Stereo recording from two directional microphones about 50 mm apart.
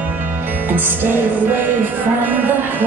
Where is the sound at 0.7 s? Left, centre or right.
Right.